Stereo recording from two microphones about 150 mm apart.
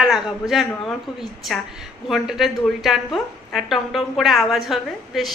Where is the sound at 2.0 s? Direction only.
5° right (ahead or behind).